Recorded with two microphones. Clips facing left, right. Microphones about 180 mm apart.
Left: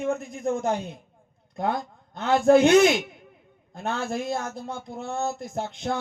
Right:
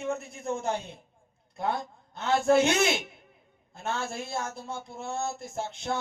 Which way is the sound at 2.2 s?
40° left (ahead or behind).